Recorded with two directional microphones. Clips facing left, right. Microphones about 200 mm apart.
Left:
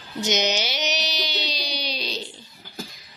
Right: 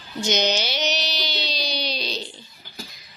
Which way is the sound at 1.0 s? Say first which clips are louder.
Even; 15° left (ahead or behind).